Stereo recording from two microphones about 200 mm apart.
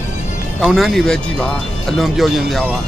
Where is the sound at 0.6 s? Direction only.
Centre (ahead or behind).